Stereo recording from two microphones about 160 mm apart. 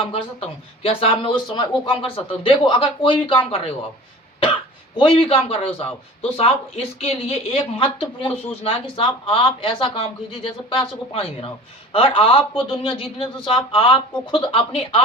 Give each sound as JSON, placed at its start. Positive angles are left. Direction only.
{"t": 0.0, "sound": "speech", "side_deg": 35}
{"t": 4.9, "sound": "speech", "side_deg": 30}